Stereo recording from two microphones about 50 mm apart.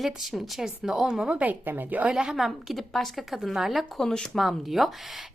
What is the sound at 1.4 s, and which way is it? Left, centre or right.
Speech, right.